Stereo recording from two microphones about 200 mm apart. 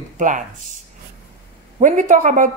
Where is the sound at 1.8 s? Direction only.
40° right (ahead or behind).